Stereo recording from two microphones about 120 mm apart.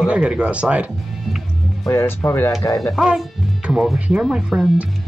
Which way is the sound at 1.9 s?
25° left (ahead or behind).